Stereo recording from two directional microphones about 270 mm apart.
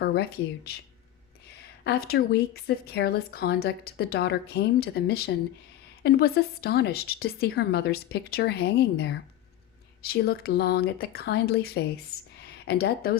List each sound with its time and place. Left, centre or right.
0.0 s a woman's voice: left
1.8 s a woman's voice: left